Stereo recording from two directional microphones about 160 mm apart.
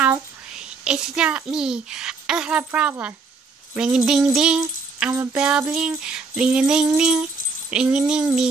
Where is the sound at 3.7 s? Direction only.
5° right (ahead or behind).